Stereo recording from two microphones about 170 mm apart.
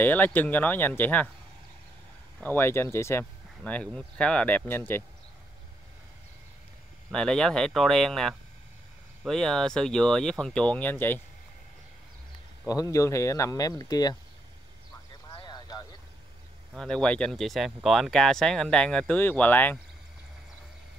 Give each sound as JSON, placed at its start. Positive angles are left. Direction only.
{"t": 0.0, "sound": "speech", "side_deg": 10}
{"t": 2.4, "sound": "speech", "side_deg": 10}
{"t": 7.1, "sound": "speech", "side_deg": 5}
{"t": 12.6, "sound": "speech", "side_deg": 20}
{"t": 15.4, "sound": "vehicle", "side_deg": 25}
{"t": 16.7, "sound": "speech", "side_deg": 5}